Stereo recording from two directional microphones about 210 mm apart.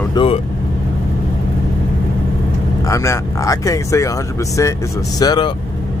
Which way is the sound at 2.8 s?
15° left (ahead or behind).